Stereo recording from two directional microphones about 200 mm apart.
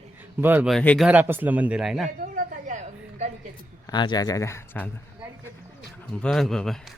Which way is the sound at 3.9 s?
20° left (ahead or behind).